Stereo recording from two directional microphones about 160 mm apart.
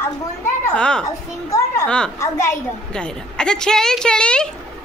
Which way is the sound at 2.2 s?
20° left (ahead or behind).